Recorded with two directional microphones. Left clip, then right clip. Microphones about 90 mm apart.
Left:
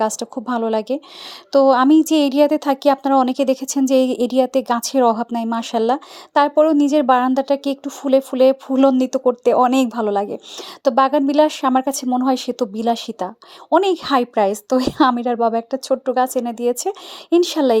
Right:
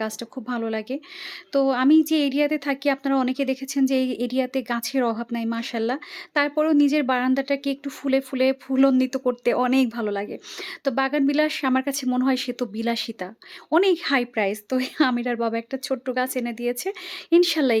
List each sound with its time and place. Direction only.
0.4 s a woman's voice: 45° left (ahead or behind)
7.9 s a woman's voice: 30° left (ahead or behind)
9.7 s a woman's voice: 40° left (ahead or behind)